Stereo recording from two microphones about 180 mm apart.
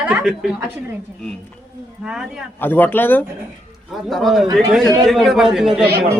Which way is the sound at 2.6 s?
10° left (ahead or behind).